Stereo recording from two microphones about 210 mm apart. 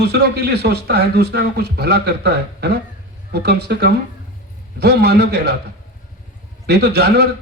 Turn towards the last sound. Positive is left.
turn(degrees=-50)  # may be behind; listen again after turning